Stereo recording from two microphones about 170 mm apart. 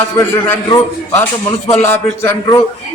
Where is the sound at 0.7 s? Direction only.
15° left (ahead or behind).